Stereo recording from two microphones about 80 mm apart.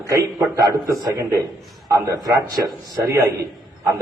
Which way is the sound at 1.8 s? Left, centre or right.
Right.